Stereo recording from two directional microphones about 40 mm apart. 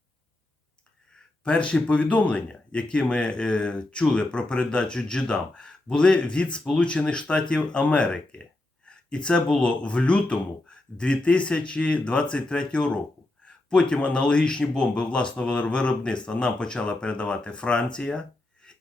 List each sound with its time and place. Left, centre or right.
1.5 s speech: left